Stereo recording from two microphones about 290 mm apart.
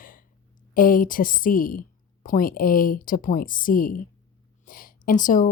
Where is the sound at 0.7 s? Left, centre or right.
Left.